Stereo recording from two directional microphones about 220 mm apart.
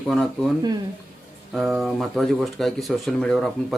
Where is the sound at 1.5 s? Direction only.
Centre (ahead or behind).